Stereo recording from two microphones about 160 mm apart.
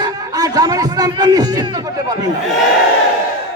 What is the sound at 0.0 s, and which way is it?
A man's voice, 25° right (ahead or behind).